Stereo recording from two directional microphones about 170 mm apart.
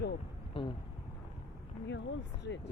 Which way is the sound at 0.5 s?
30° left (ahead or behind).